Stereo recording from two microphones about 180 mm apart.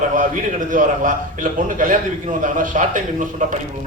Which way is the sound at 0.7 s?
45° right (ahead or behind).